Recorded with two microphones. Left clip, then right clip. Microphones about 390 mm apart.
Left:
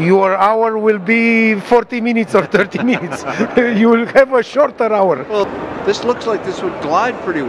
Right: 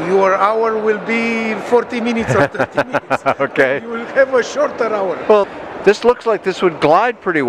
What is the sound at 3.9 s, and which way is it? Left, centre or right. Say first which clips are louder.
A man's voice: left 4 dB; left.